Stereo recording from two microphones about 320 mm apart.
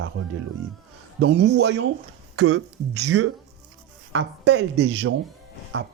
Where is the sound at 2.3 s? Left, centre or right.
Right.